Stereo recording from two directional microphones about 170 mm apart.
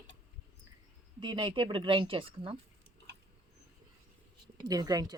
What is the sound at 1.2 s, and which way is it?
Speech, 30° right (ahead or behind).